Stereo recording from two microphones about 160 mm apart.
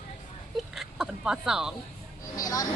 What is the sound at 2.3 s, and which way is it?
Speech, 20° left (ahead or behind).